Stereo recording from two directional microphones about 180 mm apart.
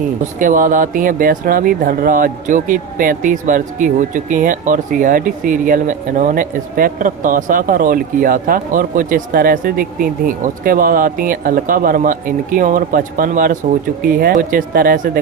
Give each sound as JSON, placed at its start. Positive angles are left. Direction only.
{"t": 0.3, "sound": "speech", "side_deg": -50}